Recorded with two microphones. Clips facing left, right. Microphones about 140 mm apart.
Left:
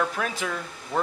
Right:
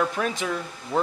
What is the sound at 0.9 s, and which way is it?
Speech, centre (ahead or behind).